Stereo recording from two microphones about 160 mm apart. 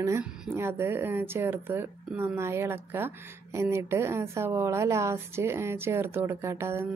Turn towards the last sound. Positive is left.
turn(degrees=-15)  # may be behind; listen again after turning